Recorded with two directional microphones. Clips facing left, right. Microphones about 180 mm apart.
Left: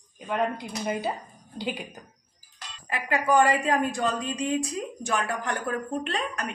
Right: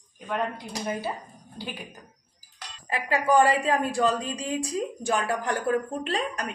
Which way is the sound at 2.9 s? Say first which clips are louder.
Right 1 dB; 30° right (ahead or behind).